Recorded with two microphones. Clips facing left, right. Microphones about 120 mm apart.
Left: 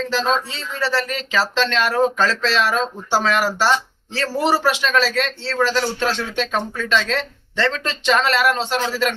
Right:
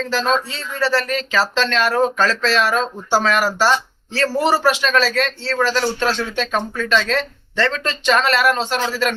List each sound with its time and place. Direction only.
0.1 s speech: 20° left (ahead or behind)